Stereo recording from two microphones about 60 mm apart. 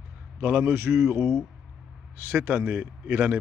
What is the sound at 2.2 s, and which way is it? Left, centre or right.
A man's voice, right.